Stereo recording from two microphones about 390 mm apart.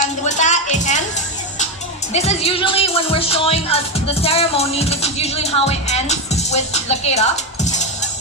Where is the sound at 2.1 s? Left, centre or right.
Centre.